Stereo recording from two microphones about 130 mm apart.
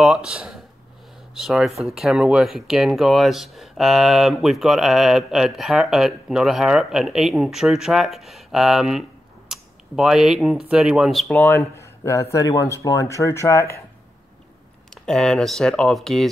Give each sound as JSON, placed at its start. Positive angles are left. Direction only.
{"t": 0.0, "sound": "speech", "side_deg": -5}
{"t": 9.5, "sound": "a sound", "side_deg": -5}
{"t": 10.7, "sound": "speech", "side_deg": -5}
{"t": 11.2, "sound": "speech", "side_deg": 20}
{"t": 15.0, "sound": "speech", "side_deg": 5}